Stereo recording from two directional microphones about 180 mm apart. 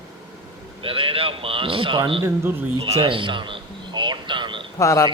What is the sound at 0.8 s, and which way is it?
A man's voice, 30° right (ahead or behind).